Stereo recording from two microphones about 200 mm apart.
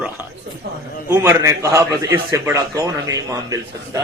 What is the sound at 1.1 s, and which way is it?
A man's voice, 15° right (ahead or behind).